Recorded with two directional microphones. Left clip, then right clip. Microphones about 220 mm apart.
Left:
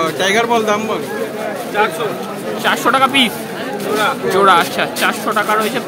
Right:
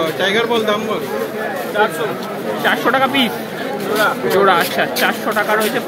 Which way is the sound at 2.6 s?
Centre (ahead or behind).